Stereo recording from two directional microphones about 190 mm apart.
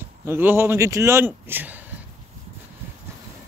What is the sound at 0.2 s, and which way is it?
A man's voice, 10° right (ahead or behind).